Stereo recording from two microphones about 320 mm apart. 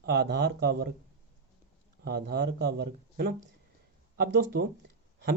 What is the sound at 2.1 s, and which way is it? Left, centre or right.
Speech, right.